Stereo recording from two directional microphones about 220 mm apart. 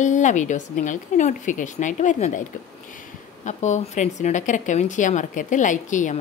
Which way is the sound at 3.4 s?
30° left (ahead or behind).